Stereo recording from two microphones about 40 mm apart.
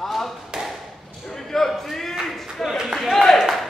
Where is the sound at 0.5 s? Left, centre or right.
Centre.